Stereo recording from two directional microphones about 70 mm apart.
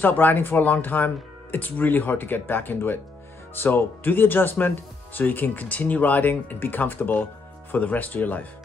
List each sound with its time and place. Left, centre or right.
0.0 s speech: left